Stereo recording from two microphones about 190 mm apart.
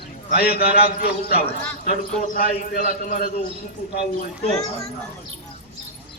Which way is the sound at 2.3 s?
45° left (ahead or behind).